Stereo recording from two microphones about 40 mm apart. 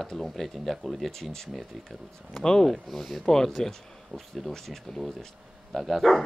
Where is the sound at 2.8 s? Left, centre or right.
Centre.